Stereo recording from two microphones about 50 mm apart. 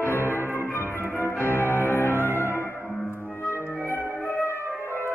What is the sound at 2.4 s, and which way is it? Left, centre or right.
Music, left.